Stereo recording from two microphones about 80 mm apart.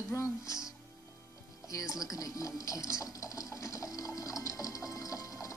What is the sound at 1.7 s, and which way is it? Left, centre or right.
Speech, left.